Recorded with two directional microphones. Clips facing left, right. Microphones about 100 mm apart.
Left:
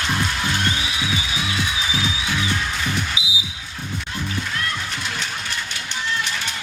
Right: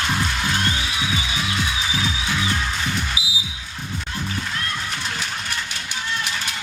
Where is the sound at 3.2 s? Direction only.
25° left (ahead or behind).